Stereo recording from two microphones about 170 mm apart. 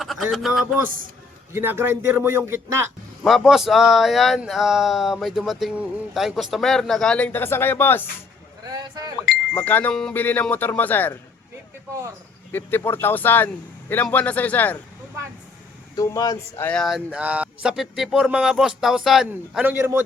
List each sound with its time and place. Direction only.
0.0 s speech: centre (ahead or behind)
1.5 s a man's voice: 15° right (ahead or behind)
3.2 s speech: centre (ahead or behind)
9.6 s speech: 10° left (ahead or behind)
12.5 s speech: 10° left (ahead or behind)
16.0 s speech: 20° left (ahead or behind)
16.6 s speech: centre (ahead or behind); by 20.0 s 15° right (ahead or behind)